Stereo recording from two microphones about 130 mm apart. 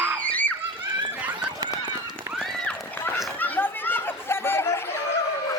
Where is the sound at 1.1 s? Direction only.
10° right (ahead or behind).